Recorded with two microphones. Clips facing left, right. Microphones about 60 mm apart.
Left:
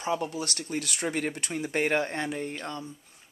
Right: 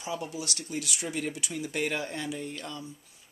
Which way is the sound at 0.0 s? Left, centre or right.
Left.